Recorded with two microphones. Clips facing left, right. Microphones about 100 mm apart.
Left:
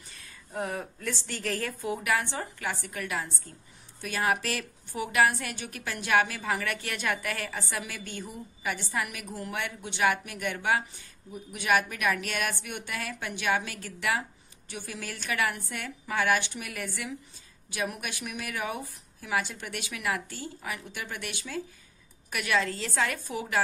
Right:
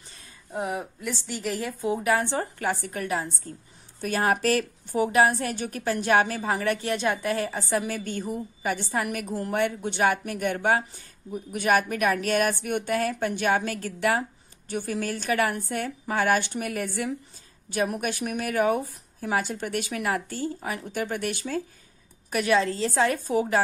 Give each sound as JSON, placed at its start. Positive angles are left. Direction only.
{"t": 0.1, "sound": "a woman's voice", "side_deg": -20}
{"t": 1.8, "sound": "a woman's voice", "side_deg": -30}
{"t": 22.3, "sound": "a woman's voice", "side_deg": -35}